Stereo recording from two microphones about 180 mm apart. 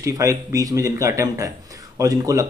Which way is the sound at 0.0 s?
15° right (ahead or behind).